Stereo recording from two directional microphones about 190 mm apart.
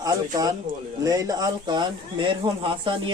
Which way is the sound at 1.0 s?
20° right (ahead or behind).